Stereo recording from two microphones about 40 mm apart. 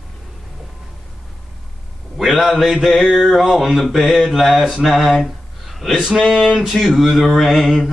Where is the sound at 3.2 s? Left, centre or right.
Centre.